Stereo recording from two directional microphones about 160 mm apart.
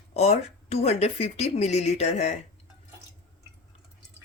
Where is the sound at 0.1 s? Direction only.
40° left (ahead or behind).